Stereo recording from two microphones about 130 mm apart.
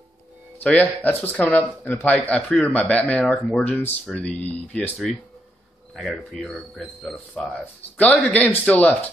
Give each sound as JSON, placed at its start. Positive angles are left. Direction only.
{"t": 0.6, "sound": "speech", "side_deg": 10}
{"t": 8.3, "sound": "speech", "side_deg": 10}